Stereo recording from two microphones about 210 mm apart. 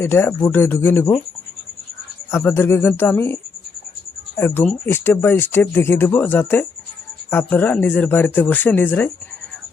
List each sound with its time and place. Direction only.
0.0 s speech: 10° left (ahead or behind)
2.3 s speech: 15° left (ahead or behind)
4.4 s speech: 10° left (ahead or behind)